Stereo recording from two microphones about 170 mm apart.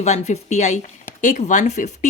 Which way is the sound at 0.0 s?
40° left (ahead or behind).